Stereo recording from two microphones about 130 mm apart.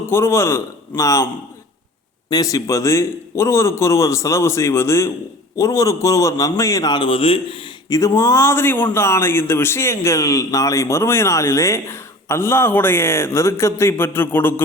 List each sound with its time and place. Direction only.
0.0 s a man's voice: 20° left (ahead or behind)
2.3 s a man's voice: 30° left (ahead or behind)
7.9 s a man's voice: 25° left (ahead or behind)